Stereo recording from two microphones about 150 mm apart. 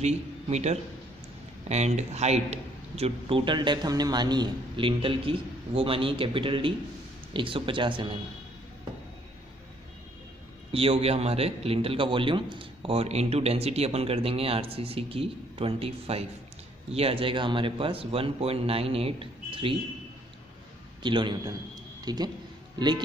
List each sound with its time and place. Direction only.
0.0 s a man's voice: 50° right (ahead or behind)
10.7 s a man's voice: 40° right (ahead or behind)
21.0 s a man's voice: 30° right (ahead or behind)